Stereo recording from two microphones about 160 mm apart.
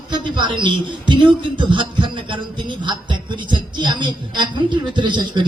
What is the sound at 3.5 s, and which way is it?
A woman's voice, 30° right (ahead or behind).